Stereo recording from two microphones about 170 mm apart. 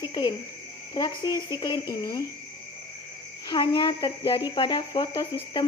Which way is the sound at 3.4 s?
25° left (ahead or behind).